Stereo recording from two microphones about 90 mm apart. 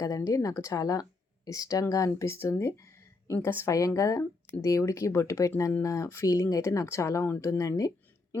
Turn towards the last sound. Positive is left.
turn(degrees=40)  # may be behind; listen again after turning